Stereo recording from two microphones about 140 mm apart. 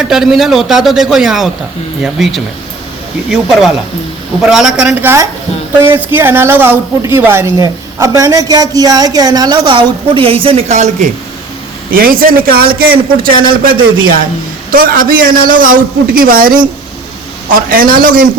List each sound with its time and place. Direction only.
0.0 s a man's voice: 5° right (ahead or behind); by 11.1 s 55° right (ahead or behind)
11.9 s a man's voice: 90° right
17.5 s a man's voice: 90° right